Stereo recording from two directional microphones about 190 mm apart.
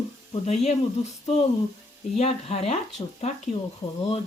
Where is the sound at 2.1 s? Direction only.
35° left (ahead or behind).